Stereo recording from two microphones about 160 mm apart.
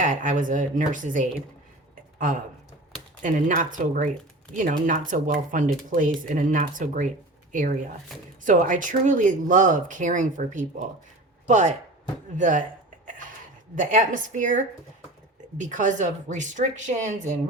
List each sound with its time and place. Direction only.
0.0 s speech: 50° right (ahead or behind)
8.4 s speech: 55° right (ahead or behind)
13.7 s speech: 55° right (ahead or behind)